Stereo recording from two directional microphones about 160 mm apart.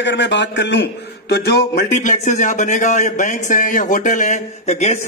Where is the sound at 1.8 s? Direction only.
50° left (ahead or behind).